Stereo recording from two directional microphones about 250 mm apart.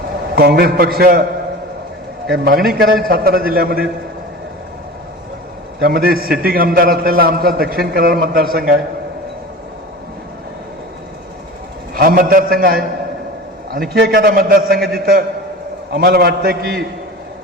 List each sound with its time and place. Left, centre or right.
0.3 s a man's voice: right
2.3 s a man's voice: right
5.8 s a man's voice: right
11.9 s a man's voice: right
13.9 s a man's voice: right